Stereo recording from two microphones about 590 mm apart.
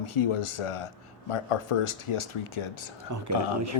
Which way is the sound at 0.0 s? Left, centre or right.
Left.